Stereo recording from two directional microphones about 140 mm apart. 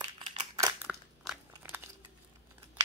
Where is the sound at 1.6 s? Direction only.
15° right (ahead or behind).